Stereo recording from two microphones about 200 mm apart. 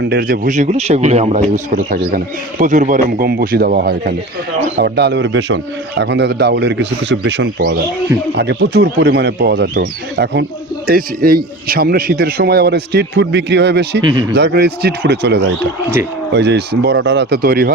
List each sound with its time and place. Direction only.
0.0 s a man's voice: 50° right (ahead or behind)
14.0 s speech: 25° right (ahead or behind)
14.3 s speech: 55° right (ahead or behind)